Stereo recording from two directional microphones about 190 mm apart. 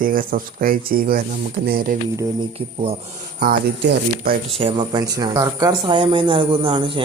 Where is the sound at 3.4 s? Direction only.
55° right (ahead or behind).